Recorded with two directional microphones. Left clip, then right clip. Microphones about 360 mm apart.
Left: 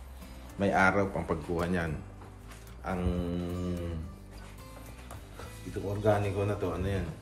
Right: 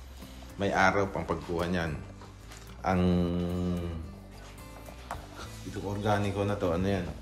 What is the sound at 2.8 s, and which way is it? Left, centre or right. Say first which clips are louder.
Mantra: right 6 dB; right.